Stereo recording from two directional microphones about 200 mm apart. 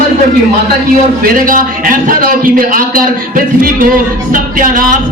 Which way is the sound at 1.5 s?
45° right (ahead or behind).